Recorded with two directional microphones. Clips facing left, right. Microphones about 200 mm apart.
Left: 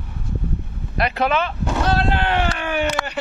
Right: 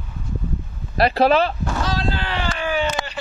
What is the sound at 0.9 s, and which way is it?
Speech, 35° right (ahead or behind).